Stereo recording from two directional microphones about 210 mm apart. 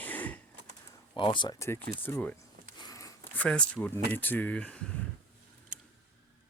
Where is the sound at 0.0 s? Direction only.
10° left (ahead or behind).